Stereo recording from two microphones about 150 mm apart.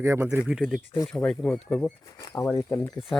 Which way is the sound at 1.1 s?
5° left (ahead or behind).